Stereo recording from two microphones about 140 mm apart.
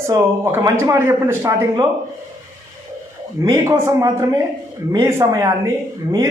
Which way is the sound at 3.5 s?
20° right (ahead or behind).